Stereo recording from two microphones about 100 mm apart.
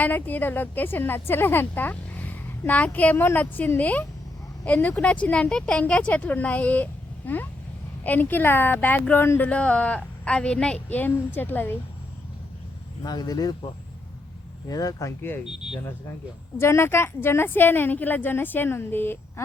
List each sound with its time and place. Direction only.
0.0 s a woman's voice: 15° left (ahead or behind)
13.0 s speech: 40° left (ahead or behind)
14.7 s speech: 35° left (ahead or behind)
16.6 s a woman's voice: 25° left (ahead or behind)